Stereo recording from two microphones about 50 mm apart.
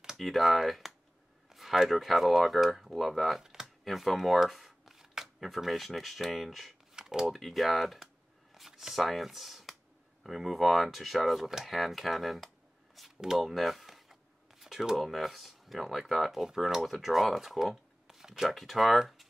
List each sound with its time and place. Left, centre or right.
0.0 s speech: centre
3.8 s shuffling cards: centre
5.4 s speech: centre
7.0 s a sound: centre
7.2 s speech: centre